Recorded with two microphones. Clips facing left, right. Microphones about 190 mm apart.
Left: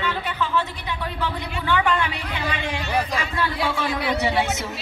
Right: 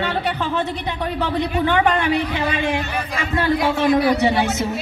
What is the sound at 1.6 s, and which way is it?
Speech, 60° right (ahead or behind).